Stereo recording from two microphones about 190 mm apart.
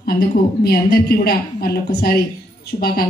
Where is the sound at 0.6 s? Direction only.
55° left (ahead or behind).